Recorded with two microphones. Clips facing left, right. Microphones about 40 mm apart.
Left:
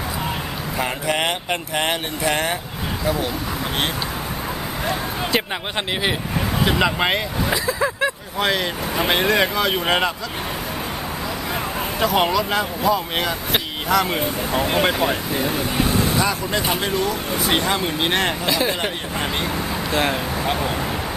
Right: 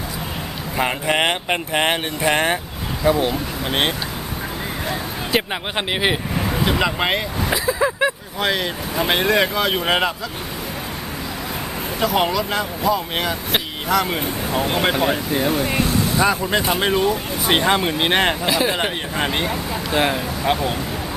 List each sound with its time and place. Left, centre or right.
0.8 s speech: centre
4.9 s speech: centre
6.7 s speech: centre
11.9 s speech: centre
16.2 s speech: right
18.4 s speech: centre